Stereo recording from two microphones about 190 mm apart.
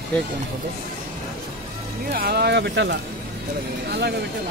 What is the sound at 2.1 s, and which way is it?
Speech, 55° right (ahead or behind).